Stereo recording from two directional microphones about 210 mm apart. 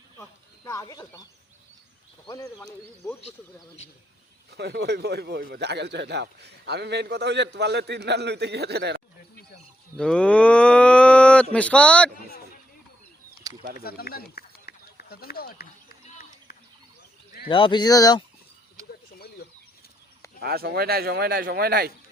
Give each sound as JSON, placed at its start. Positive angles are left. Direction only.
{"t": 0.2, "sound": "a sound", "side_deg": 15}
{"t": 2.2, "sound": "speech", "side_deg": 15}
{"t": 4.5, "sound": "a man's voice", "side_deg": -50}
{"t": 10.0, "sound": "cattle", "side_deg": 5}
{"t": 11.5, "sound": "speech", "side_deg": 5}
{"t": 13.5, "sound": "a sound", "side_deg": -20}
{"t": 13.8, "sound": "a sound", "side_deg": 45}
{"t": 17.5, "sound": "speech", "side_deg": 20}
{"t": 20.4, "sound": "a man's voice", "side_deg": -45}